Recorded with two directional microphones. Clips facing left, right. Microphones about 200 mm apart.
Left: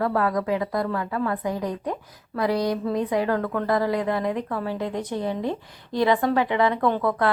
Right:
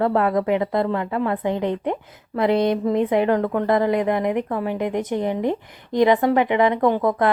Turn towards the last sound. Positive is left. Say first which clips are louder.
# right 4 dB
turn(degrees=-20)  # may be behind; listen again after turning